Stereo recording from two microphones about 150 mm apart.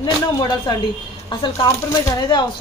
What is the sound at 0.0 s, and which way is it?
Speech, 30° left (ahead or behind).